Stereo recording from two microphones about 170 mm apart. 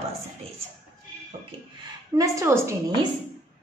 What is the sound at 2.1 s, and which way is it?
Speech, 20° right (ahead or behind).